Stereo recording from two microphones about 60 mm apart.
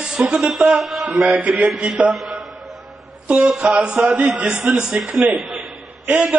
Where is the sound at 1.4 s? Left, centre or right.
Right.